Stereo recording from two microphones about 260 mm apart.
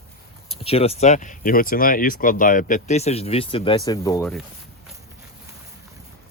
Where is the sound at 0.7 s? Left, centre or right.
Left.